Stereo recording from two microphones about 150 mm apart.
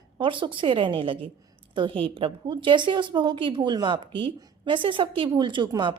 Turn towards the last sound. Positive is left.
turn(degrees=-30)  # may be behind; listen again after turning